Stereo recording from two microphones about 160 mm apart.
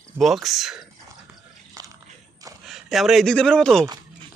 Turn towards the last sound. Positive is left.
turn(degrees=5)  # may be behind; listen again after turning